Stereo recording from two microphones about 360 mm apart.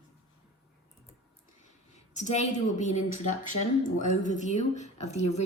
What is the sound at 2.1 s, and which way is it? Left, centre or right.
A woman's voice, centre.